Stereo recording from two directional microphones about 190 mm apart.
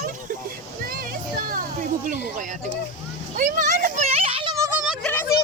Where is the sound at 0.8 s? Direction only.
50° right (ahead or behind).